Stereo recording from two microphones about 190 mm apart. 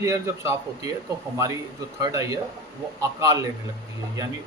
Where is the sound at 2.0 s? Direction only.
20° right (ahead or behind).